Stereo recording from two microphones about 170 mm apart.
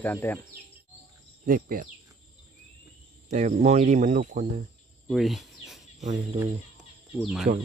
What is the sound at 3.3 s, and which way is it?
Speech, 40° right (ahead or behind).